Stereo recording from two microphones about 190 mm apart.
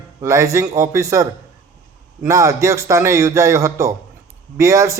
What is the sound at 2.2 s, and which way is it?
A man's voice, 15° right (ahead or behind).